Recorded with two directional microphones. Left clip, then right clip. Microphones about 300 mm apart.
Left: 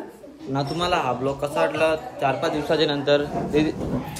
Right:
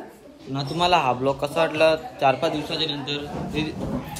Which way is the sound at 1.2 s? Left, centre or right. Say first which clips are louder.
Right 1 dB; right.